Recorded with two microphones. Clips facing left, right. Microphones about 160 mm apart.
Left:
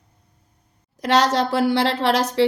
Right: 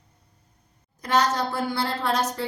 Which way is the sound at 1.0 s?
90° left.